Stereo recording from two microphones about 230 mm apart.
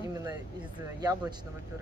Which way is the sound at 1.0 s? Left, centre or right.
Centre.